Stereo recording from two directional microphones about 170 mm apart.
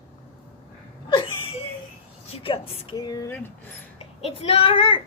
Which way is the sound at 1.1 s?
25° left (ahead or behind).